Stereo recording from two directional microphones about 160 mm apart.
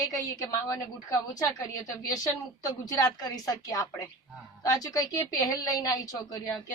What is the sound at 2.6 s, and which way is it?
A woman's voice, 25° left (ahead or behind).